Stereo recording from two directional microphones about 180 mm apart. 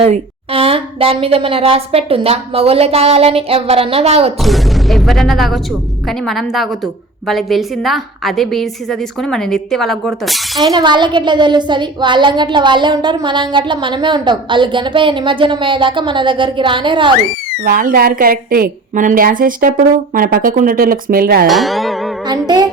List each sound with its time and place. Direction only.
0.0 s a woman's voice: 30° right (ahead or behind)
4.4 s music: centre (ahead or behind)
6.1 s a woman's voice: centre (ahead or behind)
10.6 s a woman's voice: 25° right (ahead or behind)
17.7 s a woman's voice: 55° right (ahead or behind)
21.4 s a woman's voice: centre (ahead or behind)
22.4 s a woman's voice: 25° right (ahead or behind)